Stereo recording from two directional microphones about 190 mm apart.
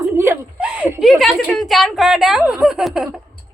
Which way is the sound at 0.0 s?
10° right (ahead or behind).